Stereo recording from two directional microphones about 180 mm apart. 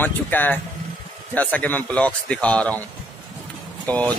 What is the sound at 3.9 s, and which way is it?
Speech, 10° left (ahead or behind).